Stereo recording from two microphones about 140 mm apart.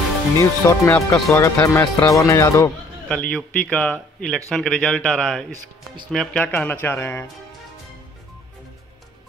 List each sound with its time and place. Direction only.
0.4 s speech: 20° left (ahead or behind)
3.1 s speech: 10° left (ahead or behind)